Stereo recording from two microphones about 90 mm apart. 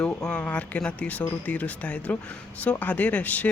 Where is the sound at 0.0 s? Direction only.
10° left (ahead or behind).